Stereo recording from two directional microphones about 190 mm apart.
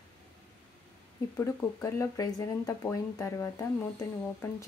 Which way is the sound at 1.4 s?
15° left (ahead or behind).